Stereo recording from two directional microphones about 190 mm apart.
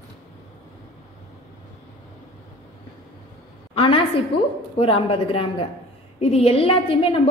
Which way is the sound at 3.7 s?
30° left (ahead or behind).